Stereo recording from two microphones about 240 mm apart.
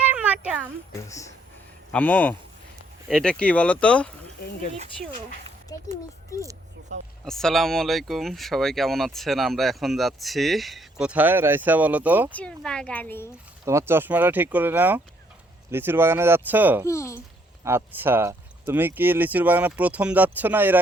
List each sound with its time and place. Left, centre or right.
0.1 s a sound: centre
1.0 s speech: centre
5.7 s speech: centre
6.9 s speech: right
7.3 s speech: centre
12.3 s speech: centre
13.7 s speech: centre
16.8 s speech: centre
17.6 s speech: centre